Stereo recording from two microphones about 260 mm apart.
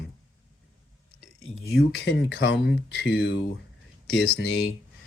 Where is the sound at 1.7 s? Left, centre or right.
Left.